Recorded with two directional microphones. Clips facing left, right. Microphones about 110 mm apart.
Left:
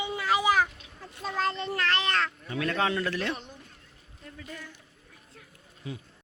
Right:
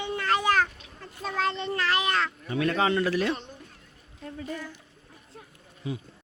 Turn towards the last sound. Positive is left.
turn(degrees=-15)  # may be behind; listen again after turning